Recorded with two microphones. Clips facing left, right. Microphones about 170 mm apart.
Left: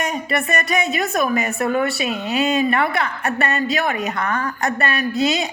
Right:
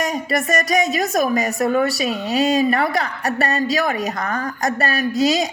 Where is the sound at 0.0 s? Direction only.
40° right (ahead or behind).